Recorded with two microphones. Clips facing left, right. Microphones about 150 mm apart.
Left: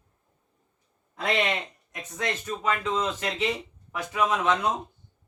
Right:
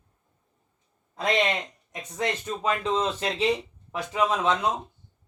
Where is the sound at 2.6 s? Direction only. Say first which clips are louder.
Right 2 dB; 30° right (ahead or behind).